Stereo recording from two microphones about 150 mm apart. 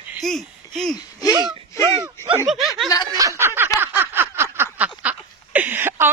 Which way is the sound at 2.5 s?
Centre (ahead or behind).